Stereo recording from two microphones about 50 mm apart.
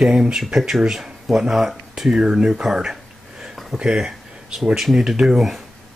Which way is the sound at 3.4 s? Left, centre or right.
Centre.